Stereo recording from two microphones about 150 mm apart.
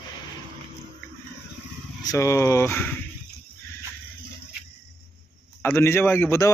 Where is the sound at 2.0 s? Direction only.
20° left (ahead or behind).